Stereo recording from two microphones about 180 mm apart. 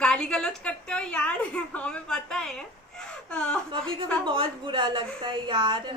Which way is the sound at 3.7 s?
30° right (ahead or behind).